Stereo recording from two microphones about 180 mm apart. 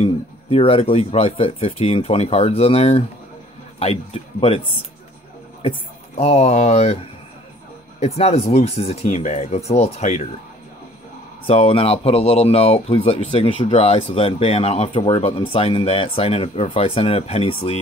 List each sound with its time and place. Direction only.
0.0 s speech: 30° left (ahead or behind)
5.6 s speech: 35° left (ahead or behind)
11.4 s speech: 35° left (ahead or behind)